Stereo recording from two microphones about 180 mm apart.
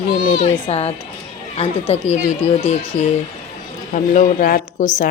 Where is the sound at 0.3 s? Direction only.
35° left (ahead or behind).